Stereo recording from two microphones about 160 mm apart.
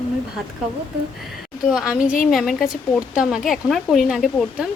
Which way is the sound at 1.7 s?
5° right (ahead or behind).